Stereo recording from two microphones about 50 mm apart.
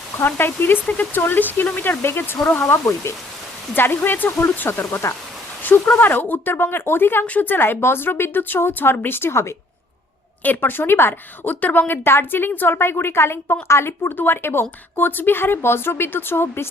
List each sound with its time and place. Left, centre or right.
0.3 s a woman's voice: left
3.8 s a woman's voice: left
5.6 s a woman's voice: left
10.4 s a woman's voice: left
11.6 s a woman's voice: left